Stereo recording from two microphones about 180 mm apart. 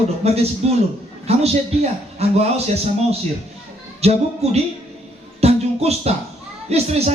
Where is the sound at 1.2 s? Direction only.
35° right (ahead or behind).